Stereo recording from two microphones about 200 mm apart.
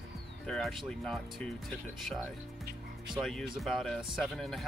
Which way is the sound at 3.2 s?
Centre (ahead or behind).